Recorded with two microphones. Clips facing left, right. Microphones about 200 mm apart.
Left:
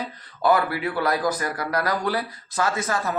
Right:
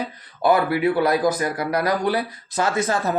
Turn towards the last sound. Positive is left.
turn(degrees=-30)  # may be behind; listen again after turning